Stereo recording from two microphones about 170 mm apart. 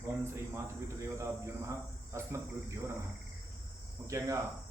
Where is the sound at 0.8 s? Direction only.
15° right (ahead or behind).